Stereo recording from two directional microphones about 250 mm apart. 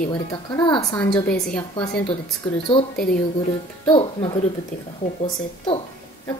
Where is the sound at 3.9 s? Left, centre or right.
Left.